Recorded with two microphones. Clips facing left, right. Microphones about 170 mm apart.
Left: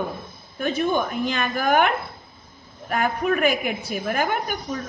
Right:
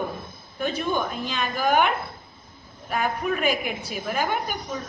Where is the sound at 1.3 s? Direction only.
55° left (ahead or behind).